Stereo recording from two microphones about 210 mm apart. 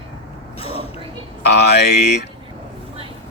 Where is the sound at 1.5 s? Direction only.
50° left (ahead or behind).